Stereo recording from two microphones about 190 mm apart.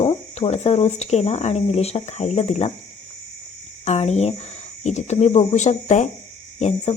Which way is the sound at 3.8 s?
35° left (ahead or behind).